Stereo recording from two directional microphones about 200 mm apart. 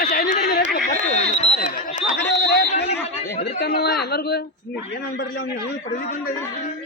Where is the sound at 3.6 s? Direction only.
50° left (ahead or behind).